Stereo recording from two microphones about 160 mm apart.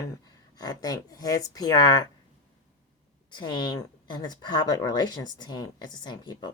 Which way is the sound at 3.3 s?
30° left (ahead or behind).